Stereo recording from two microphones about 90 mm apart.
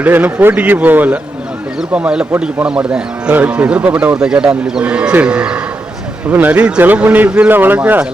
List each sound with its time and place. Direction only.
0.0 s speech: 20° right (ahead or behind)